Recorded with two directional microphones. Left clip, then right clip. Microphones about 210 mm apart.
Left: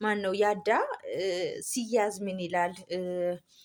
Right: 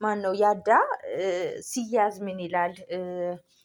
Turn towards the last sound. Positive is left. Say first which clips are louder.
# even
turn(degrees=5)  # may be behind; listen again after turning